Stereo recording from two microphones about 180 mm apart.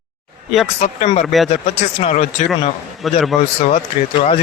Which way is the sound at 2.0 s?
40° left (ahead or behind).